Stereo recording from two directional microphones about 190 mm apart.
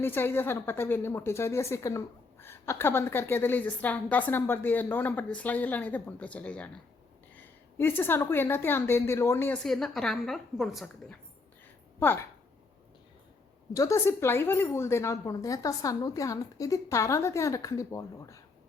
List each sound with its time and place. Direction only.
0.0 s a woman's voice: 10° left (ahead or behind)
9.6 s a woman's voice: centre (ahead or behind)
11.9 s speech: 10° left (ahead or behind)
13.7 s speech: 15° left (ahead or behind)